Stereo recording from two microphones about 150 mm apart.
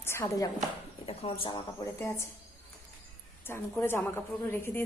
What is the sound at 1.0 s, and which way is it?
Speech, 40° left (ahead or behind).